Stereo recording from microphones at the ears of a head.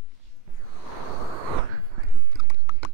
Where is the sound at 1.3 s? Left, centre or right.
Right.